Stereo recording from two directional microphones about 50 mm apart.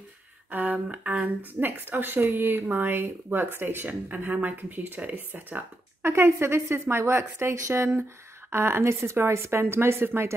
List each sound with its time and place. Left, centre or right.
0.5 s speech: right
1.2 s speech: right
6.0 s a woman's voice: right